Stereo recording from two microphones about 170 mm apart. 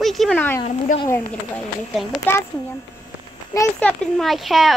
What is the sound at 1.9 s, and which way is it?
Speech, centre (ahead or behind).